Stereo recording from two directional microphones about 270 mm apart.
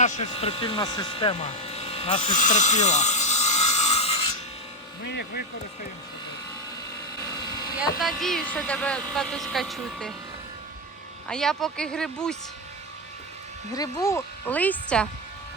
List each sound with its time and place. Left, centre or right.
0.0 s speech: left
5.0 s speech: left
7.2 s vehicle: centre
7.9 s speech: centre
11.3 s speech: centre
13.7 s speech: centre